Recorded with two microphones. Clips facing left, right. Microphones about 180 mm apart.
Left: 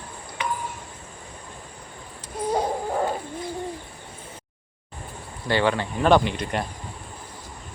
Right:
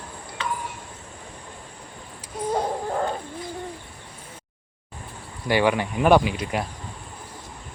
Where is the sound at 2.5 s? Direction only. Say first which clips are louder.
Left 1 dB; 5° left (ahead or behind).